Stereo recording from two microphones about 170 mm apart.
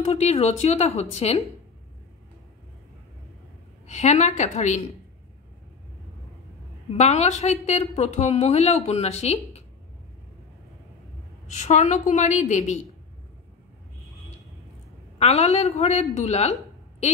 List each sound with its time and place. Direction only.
0.0 s a woman's voice: 40° left (ahead or behind)
3.8 s a woman's voice: 40° left (ahead or behind)
7.0 s a woman's voice: 40° left (ahead or behind)
11.4 s a woman's voice: 40° left (ahead or behind)
15.1 s a woman's voice: 40° left (ahead or behind)